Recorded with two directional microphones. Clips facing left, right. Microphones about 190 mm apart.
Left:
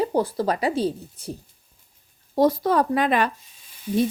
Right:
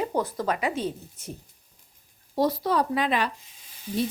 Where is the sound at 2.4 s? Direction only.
50° left (ahead or behind).